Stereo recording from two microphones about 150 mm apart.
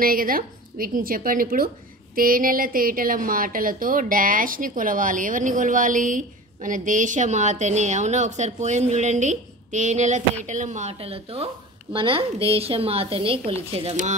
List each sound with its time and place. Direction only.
0.0 s a woman's voice: 70° right (ahead or behind); by 14.1 s 45° right (ahead or behind)